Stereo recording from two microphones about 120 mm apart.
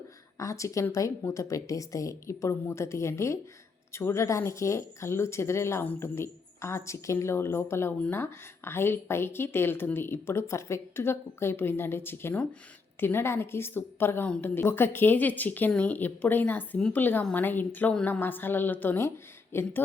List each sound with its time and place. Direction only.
0.3 s speech: 25° left (ahead or behind)